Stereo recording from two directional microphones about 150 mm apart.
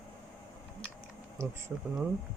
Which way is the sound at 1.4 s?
20° right (ahead or behind).